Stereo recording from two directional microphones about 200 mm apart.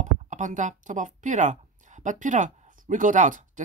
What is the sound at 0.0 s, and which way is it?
Speech, 40° right (ahead or behind).